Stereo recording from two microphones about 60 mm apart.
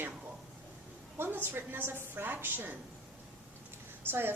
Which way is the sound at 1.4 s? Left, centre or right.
Right.